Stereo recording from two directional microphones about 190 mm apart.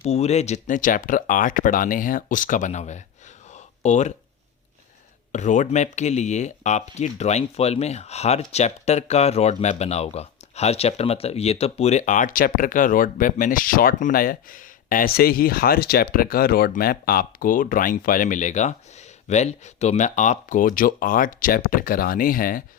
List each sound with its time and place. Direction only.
0.0 s speech: 35° left (ahead or behind)
3.5 s a sound: 40° left (ahead or behind)
5.3 s speech: 40° left (ahead or behind)